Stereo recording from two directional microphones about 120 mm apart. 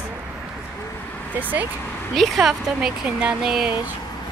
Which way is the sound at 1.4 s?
15° right (ahead or behind).